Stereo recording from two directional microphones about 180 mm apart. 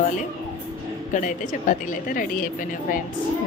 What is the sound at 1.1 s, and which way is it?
Speech, 45° left (ahead or behind).